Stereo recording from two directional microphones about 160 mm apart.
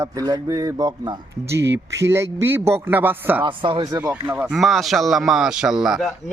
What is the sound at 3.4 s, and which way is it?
Speech, 30° right (ahead or behind).